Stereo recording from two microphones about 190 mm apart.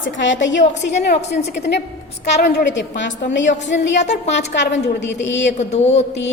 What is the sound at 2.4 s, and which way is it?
A woman's voice, 65° left (ahead or behind).